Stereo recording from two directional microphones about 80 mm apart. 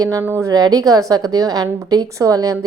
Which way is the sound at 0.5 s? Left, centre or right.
Right.